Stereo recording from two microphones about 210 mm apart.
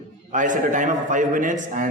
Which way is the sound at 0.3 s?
35° right (ahead or behind).